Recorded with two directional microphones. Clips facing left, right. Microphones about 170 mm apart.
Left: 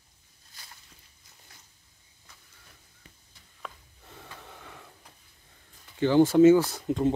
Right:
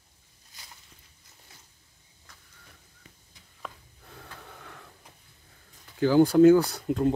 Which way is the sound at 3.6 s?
Centre (ahead or behind).